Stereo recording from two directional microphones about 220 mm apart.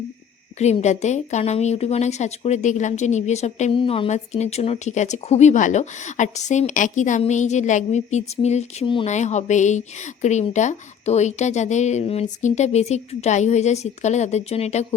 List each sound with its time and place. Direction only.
0.6 s speech: 30° left (ahead or behind)